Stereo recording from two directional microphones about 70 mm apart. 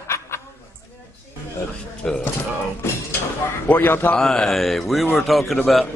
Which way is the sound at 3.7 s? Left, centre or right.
Left.